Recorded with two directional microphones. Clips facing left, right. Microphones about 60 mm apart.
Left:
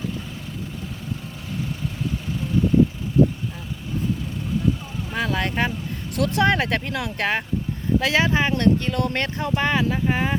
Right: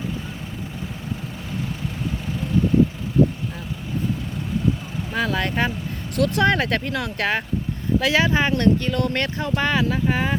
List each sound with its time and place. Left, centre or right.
5.1 s speech: centre
6.1 s speech: left
6.6 s speech: centre
8.0 s speech: centre
8.3 s speech: centre